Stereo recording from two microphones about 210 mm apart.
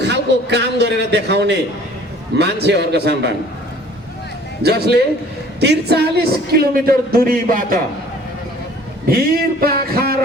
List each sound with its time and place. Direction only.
0.0 s music: 55° right (ahead or behind)
1.3 s speech: 55° right (ahead or behind)
4.6 s speech: 50° right (ahead or behind)
9.0 s speech: 45° right (ahead or behind)